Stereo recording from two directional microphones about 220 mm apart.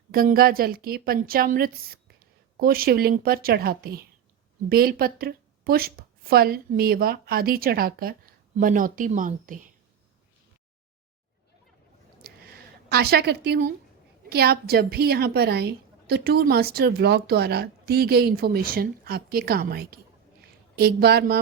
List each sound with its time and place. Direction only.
0.1 s a woman's voice: 40° right (ahead or behind)
12.9 s a woman's voice: 45° right (ahead or behind)